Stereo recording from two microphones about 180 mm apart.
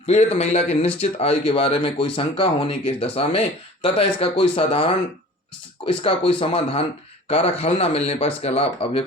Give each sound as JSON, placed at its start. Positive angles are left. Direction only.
{"t": 0.1, "sound": "speech", "side_deg": 40}